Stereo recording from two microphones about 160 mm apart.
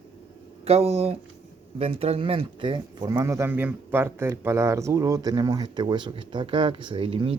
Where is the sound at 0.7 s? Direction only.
40° right (ahead or behind).